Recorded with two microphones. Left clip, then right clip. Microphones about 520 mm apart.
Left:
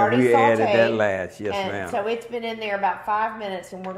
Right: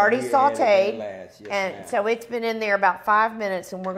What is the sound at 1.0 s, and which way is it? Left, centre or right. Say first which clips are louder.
Speech: left 11 dB; left.